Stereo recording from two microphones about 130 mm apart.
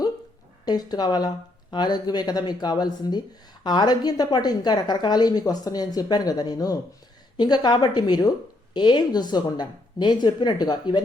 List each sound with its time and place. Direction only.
0.6 s a woman's voice: 30° left (ahead or behind)